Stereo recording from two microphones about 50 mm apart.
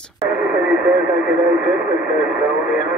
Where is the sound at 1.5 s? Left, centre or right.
Centre.